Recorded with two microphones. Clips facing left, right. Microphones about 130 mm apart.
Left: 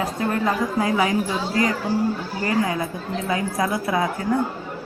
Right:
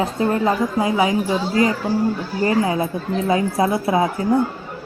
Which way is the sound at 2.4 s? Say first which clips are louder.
Right 4 dB; 25° right (ahead or behind).